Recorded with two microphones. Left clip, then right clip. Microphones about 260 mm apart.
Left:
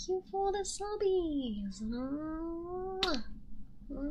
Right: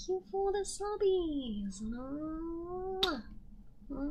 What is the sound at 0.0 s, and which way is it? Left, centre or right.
Speech, centre.